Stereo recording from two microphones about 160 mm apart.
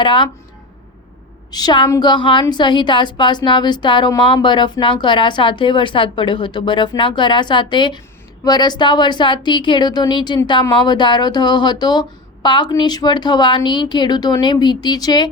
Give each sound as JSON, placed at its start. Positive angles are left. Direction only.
{"t": 0.0, "sound": "speech", "side_deg": 30}
{"t": 1.5, "sound": "a woman's voice", "side_deg": 25}